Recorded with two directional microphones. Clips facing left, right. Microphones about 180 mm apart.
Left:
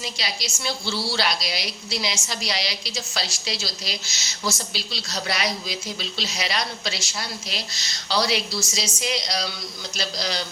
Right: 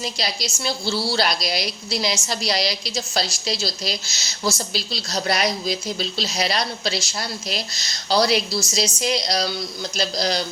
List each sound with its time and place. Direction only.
0.0 s a woman's voice: 40° right (ahead or behind)